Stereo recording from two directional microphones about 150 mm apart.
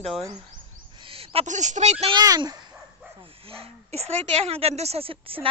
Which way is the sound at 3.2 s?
40° right (ahead or behind).